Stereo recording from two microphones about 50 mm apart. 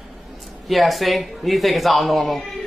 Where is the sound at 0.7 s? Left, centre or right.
Centre.